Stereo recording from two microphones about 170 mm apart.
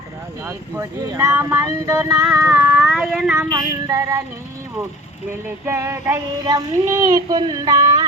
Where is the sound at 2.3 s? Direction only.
15° right (ahead or behind).